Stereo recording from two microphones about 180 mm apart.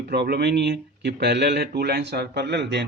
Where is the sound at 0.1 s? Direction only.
65° right (ahead or behind).